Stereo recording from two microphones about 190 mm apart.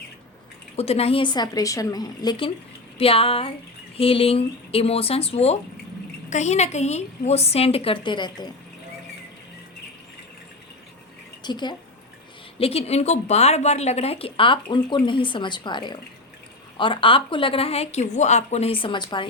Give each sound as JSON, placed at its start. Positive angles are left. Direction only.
{"t": 0.8, "sound": "a woman's voice", "side_deg": 30}
{"t": 11.4, "sound": "a woman's voice", "side_deg": 25}